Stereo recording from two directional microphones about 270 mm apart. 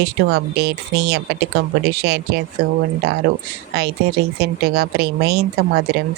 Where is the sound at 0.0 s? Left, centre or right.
Right.